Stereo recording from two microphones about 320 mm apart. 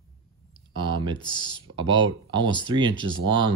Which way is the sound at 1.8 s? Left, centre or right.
Right.